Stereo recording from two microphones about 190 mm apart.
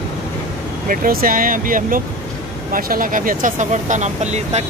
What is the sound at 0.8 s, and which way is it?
Speech, 45° right (ahead or behind).